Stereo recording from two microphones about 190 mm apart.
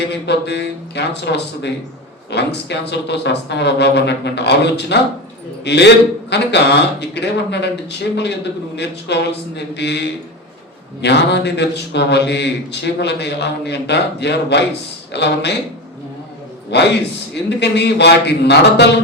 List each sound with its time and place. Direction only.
0.0 s a man's voice: 60° left (ahead or behind)
16.7 s a man's voice: 60° left (ahead or behind)